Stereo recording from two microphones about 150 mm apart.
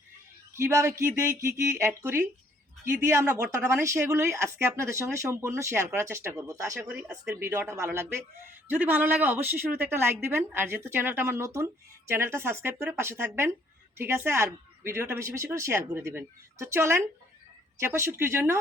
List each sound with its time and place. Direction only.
0.5 s a woman's voice: 20° right (ahead or behind)